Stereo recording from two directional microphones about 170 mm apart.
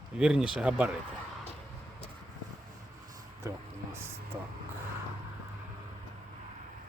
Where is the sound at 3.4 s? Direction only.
15° right (ahead or behind).